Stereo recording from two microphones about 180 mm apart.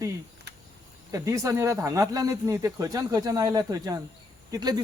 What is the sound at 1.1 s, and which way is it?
Speech, 15° right (ahead or behind).